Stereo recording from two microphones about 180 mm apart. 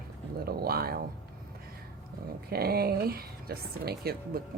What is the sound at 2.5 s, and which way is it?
Speech, 60° right (ahead or behind).